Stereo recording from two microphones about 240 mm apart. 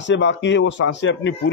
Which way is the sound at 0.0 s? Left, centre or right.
Left.